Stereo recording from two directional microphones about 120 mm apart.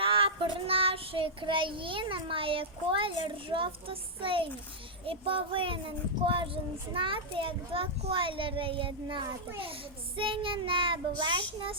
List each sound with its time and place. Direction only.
0.0 s child singing: 50° right (ahead or behind)